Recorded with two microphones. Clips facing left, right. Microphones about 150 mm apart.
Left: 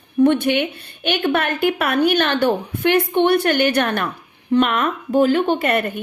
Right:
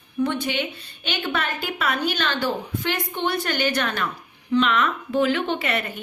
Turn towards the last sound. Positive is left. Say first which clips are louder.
# left 7 dB
turn(degrees=50)  # may be behind; listen again after turning